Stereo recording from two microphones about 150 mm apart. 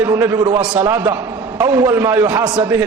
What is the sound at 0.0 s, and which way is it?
A man's voice, 15° right (ahead or behind).